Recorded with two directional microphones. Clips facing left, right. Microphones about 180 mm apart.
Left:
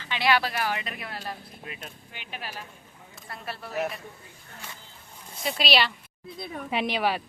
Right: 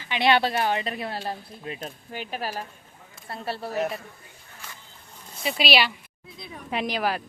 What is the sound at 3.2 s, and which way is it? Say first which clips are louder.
Speech: right 6 dB; 30° right (ahead or behind).